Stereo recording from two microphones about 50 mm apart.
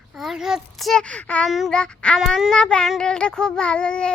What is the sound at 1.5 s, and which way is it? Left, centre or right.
Speech, centre.